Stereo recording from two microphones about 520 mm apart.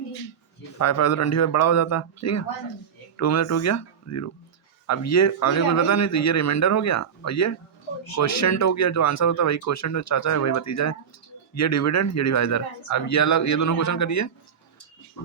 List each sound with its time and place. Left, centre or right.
0.8 s a man's voice: left